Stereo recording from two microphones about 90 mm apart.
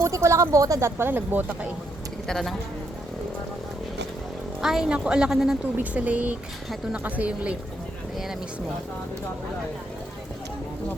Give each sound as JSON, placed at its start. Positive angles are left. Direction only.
{"t": 0.0, "sound": "speech", "side_deg": -30}
{"t": 2.2, "sound": "speech", "side_deg": 5}
{"t": 4.6, "sound": "a woman's voice", "side_deg": -5}
{"t": 5.7, "sound": "a woman's voice", "side_deg": -15}
{"t": 8.1, "sound": "speech", "side_deg": -5}